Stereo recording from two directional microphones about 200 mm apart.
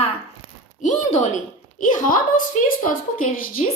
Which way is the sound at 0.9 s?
40° left (ahead or behind).